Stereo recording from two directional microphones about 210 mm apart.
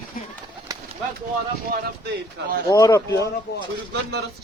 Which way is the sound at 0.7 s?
15° right (ahead or behind).